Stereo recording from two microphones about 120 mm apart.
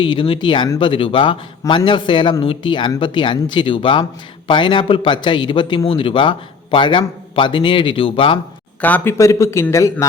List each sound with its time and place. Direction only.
0.0 s a man's voice: 45° left (ahead or behind)
8.8 s speech: 15° left (ahead or behind)
9.1 s speech: 25° left (ahead or behind)